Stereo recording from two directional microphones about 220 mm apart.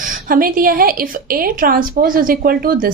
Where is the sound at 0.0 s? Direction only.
40° right (ahead or behind).